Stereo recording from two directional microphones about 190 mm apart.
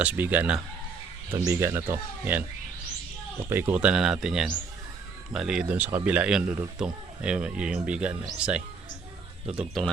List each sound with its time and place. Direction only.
0.0 s speech: 10° right (ahead or behind)
3.5 s speech: 10° right (ahead or behind)